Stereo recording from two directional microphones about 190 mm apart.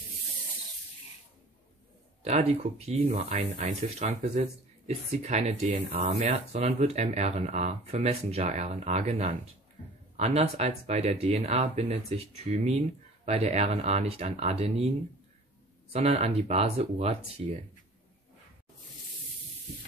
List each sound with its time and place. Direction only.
2.2 s speech: 35° right (ahead or behind)
3.0 s speech: 50° right (ahead or behind); by 14.9 s 30° right (ahead or behind)
15.9 s speech: 35° right (ahead or behind)